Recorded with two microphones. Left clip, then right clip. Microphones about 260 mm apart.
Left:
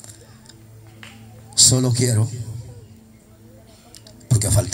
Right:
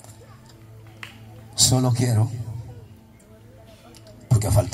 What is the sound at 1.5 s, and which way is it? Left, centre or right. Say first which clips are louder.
Speech: left 4 dB; left.